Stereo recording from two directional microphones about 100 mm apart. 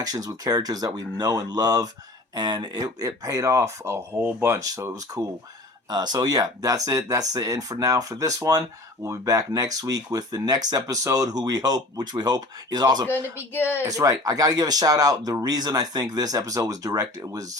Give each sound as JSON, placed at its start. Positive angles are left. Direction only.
{"t": 0.0, "sound": "speech", "side_deg": -40}
{"t": 13.5, "sound": "speech", "side_deg": 20}
{"t": 13.8, "sound": "speech", "side_deg": -35}